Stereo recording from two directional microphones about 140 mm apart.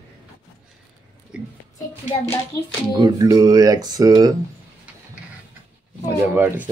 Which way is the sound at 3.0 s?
25° right (ahead or behind).